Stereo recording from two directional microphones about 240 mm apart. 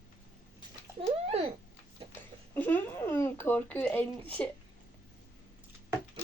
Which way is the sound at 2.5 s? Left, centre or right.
Centre.